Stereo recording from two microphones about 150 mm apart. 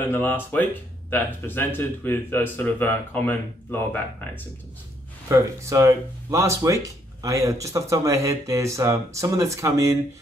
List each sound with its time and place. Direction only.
0.1 s speech: 10° left (ahead or behind)
5.3 s speech: 20° right (ahead or behind)